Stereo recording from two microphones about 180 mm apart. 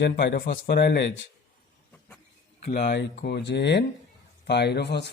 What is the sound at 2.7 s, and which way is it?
Speech, 60° left (ahead or behind).